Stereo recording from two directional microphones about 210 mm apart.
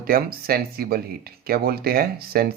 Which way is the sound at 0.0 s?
45° right (ahead or behind).